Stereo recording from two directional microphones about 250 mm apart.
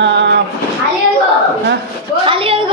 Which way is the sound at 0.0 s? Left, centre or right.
Right.